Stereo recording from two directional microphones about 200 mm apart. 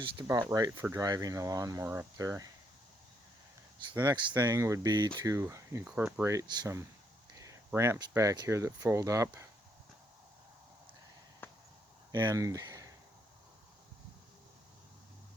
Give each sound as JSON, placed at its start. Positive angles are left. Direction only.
{"t": 0.5, "sound": "speech", "side_deg": -15}
{"t": 3.9, "sound": "speech", "side_deg": -15}
{"t": 11.4, "sound": "a sound", "side_deg": 10}
{"t": 12.1, "sound": "speech", "side_deg": -20}